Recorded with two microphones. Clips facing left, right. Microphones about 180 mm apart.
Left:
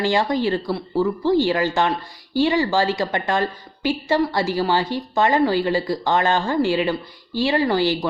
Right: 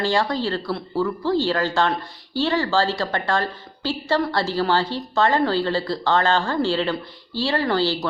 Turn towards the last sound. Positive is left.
turn(degrees=15)  # may be behind; listen again after turning